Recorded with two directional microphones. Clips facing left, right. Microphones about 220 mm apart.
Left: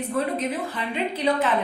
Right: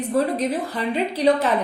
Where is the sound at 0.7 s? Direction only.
35° right (ahead or behind).